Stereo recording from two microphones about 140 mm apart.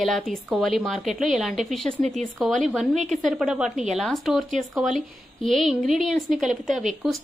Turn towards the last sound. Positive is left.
turn(degrees=0)  # may be behind; listen again after turning